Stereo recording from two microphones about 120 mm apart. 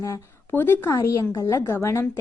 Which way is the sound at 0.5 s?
15° left (ahead or behind).